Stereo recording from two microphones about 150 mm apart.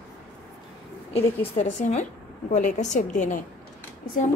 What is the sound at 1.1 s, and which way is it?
A woman's voice, 50° left (ahead or behind).